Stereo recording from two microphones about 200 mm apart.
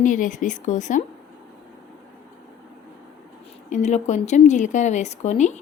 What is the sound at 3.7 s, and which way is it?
A woman's voice, 35° left (ahead or behind).